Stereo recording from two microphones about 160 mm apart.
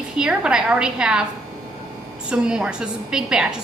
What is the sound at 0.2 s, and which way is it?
A woman's voice, 5° right (ahead or behind).